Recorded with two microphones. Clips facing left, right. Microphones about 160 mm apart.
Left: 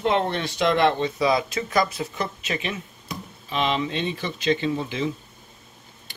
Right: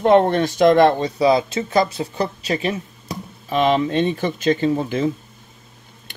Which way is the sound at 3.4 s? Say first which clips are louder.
Right 7 dB; 45° right (ahead or behind).